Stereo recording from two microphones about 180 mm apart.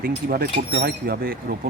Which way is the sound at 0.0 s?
55° right (ahead or behind).